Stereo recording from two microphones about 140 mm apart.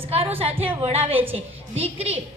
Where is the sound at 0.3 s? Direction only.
45° right (ahead or behind).